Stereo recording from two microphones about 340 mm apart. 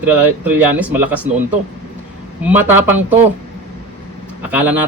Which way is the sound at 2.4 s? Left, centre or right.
Centre.